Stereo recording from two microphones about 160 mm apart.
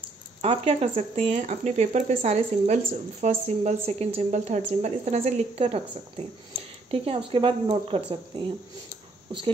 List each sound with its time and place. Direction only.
0.4 s speech: 40° right (ahead or behind)